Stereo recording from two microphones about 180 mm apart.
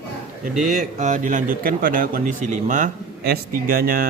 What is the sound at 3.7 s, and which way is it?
Speech, 55° right (ahead or behind).